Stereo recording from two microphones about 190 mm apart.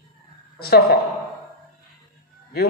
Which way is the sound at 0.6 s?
55° left (ahead or behind).